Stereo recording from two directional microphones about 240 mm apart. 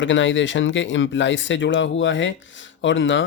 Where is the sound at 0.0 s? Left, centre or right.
Left.